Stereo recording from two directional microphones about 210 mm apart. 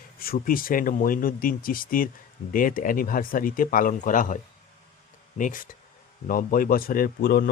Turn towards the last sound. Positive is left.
turn(degrees=45)  # may be behind; listen again after turning